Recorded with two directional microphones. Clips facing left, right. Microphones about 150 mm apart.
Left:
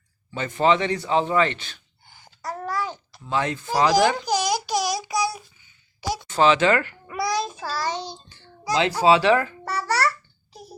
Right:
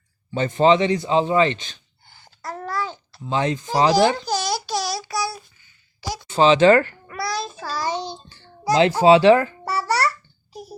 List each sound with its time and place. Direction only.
0.3 s a man's voice: 25° right (ahead or behind)
2.0 s babbling: 10° left (ahead or behind)
3.2 s a man's voice: 25° right (ahead or behind)
4.3 s a sound: 15° left (ahead or behind)
6.2 s speech: 20° right (ahead or behind); by 6.9 s 35° right (ahead or behind)
7.1 s child singing: 20° left (ahead or behind)
8.3 s a child's voice: 35° right (ahead or behind)
9.6 s a sound: 15° right (ahead or behind)